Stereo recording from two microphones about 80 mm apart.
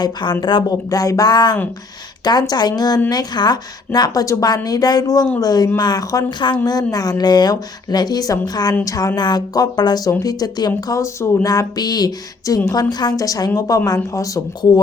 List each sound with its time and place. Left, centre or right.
0.0 s speech: left
0.7 s speech: left
1.3 s a woman's voice: left
6.4 s speech: left
6.7 s a woman's voice: left